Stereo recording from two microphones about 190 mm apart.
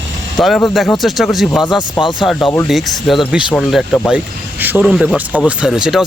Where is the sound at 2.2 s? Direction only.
Centre (ahead or behind).